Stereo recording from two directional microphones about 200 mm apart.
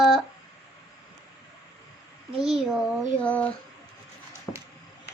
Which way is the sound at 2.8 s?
5° left (ahead or behind).